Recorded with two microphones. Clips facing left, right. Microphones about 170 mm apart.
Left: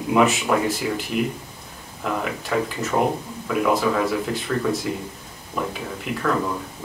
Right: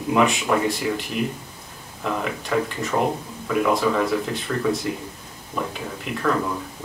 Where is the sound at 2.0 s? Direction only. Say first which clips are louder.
Even; centre (ahead or behind).